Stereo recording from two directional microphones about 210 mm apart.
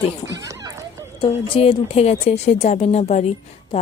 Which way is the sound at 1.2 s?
25° left (ahead or behind).